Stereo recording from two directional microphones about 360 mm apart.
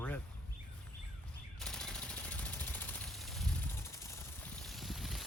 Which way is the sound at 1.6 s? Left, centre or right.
Centre.